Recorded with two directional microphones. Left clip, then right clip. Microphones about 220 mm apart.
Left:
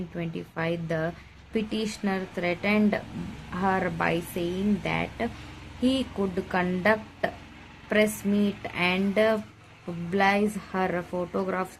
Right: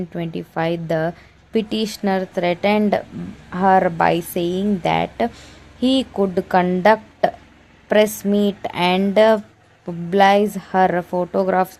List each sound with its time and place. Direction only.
0.2 s speech: 40° right (ahead or behind)